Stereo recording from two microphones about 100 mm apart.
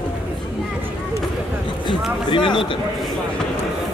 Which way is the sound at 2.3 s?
55° left (ahead or behind).